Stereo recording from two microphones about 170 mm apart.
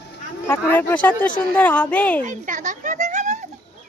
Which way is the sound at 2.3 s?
50° right (ahead or behind).